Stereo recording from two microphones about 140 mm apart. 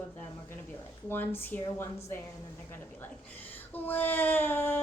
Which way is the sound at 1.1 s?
15° left (ahead or behind).